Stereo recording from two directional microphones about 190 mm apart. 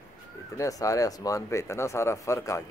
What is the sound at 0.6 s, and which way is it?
Speech, 15° left (ahead or behind).